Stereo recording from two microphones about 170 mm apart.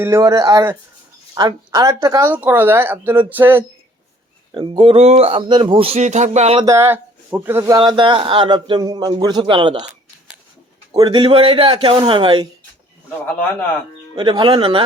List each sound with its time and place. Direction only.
0.0 s a man's voice: 15° right (ahead or behind)
4.5 s speech: 30° right (ahead or behind)
6.6 s speech: 15° right (ahead or behind)
7.8 s a man's voice: 30° right (ahead or behind)
10.9 s speech: 25° right (ahead or behind)
14.2 s a man's voice: 25° right (ahead or behind)